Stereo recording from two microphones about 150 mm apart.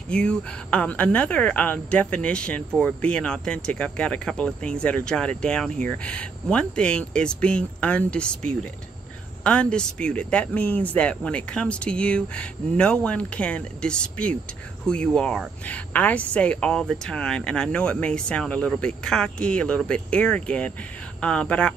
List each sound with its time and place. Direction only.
0.1 s speech: 5° left (ahead or behind)